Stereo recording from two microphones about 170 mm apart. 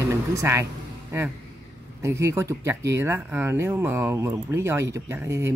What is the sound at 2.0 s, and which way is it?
Speech, 15° right (ahead or behind).